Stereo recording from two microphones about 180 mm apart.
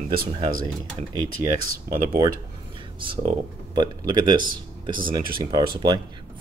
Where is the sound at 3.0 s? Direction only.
30° right (ahead or behind).